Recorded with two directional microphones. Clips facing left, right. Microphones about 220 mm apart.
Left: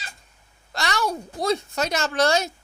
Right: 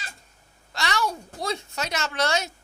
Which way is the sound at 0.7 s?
40° left (ahead or behind).